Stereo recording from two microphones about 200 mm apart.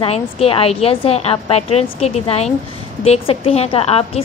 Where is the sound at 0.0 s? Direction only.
30° left (ahead or behind).